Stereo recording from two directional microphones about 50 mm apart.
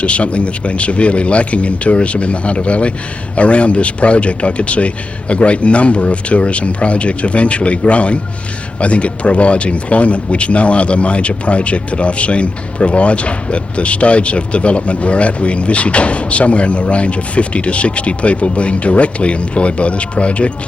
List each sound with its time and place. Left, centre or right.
0.0 s speech: left